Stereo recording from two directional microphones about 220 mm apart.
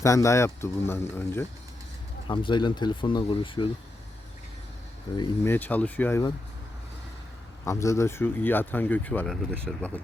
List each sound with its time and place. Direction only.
0.0 s speech: 15° left (ahead or behind)
2.2 s speech: 20° left (ahead or behind)
5.1 s speech: 15° left (ahead or behind)
7.6 s speech: 15° left (ahead or behind)